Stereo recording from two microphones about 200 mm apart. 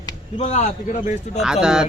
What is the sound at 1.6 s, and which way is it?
Speech, 5° right (ahead or behind).